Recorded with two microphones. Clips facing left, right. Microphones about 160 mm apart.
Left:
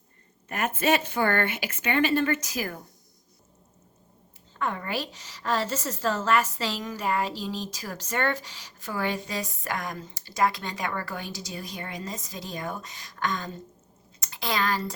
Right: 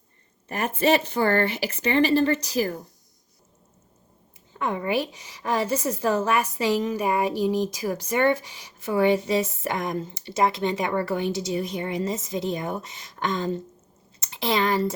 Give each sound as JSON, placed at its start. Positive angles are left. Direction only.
{"t": 0.6, "sound": "speech", "side_deg": -35}
{"t": 4.5, "sound": "a woman's voice", "side_deg": -20}